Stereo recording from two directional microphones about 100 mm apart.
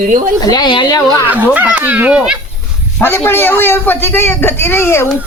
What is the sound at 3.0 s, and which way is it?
A man's voice, 25° left (ahead or behind).